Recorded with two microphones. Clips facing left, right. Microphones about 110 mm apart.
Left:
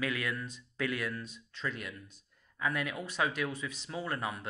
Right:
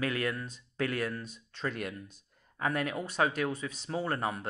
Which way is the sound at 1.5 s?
50° right (ahead or behind).